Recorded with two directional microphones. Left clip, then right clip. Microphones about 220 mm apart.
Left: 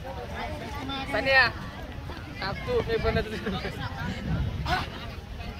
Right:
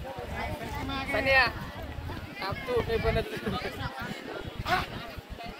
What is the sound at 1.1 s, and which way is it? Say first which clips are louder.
Speech: left 2 dB; 40° left (ahead or behind).